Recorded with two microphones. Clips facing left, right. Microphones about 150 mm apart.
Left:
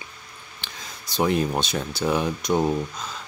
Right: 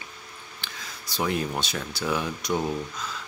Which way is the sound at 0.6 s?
20° left (ahead or behind).